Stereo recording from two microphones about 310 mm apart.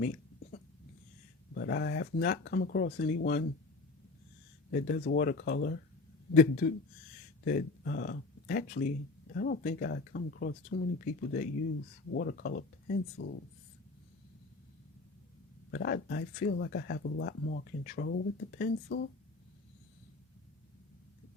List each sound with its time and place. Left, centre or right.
0.0 s a sound: left
1.5 s speech: left
4.7 s speech: left
15.7 s speech: left